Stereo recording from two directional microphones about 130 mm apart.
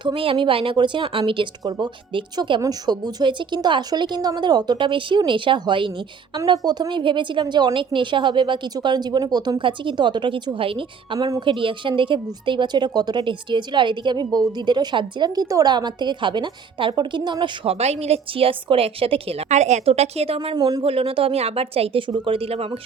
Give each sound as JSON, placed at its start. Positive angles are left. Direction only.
{"t": 0.0, "sound": "speech", "side_deg": -45}
{"t": 17.7, "sound": "a woman's voice", "side_deg": -55}
{"t": 19.5, "sound": "a woman's voice", "side_deg": -60}
{"t": 20.6, "sound": "speech", "side_deg": -30}
{"t": 20.8, "sound": "a woman's voice", "side_deg": -45}